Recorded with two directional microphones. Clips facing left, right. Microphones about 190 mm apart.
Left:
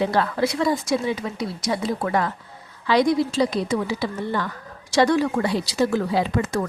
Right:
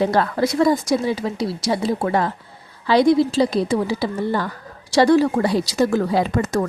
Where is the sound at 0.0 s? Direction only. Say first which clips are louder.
Right 3 dB; 40° right (ahead or behind).